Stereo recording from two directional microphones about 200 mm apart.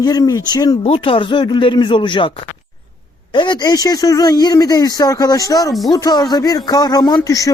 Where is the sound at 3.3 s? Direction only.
20° left (ahead or behind).